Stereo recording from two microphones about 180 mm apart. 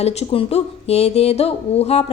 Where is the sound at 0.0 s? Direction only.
35° left (ahead or behind).